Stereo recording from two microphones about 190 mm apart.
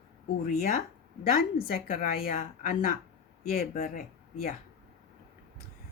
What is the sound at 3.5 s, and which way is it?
Speech, 50° left (ahead or behind).